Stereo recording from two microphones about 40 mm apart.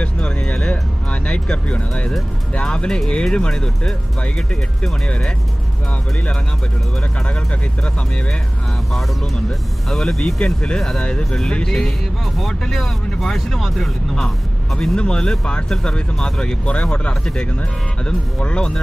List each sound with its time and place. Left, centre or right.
0.0 s a sound: left
1.2 s speech: left
9.8 s speech: centre
10.4 s speech: left; by 13.8 s centre
14.8 s speech: left
16.7 s speech: left